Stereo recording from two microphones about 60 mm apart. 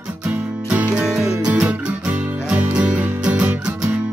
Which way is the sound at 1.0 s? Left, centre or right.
Centre.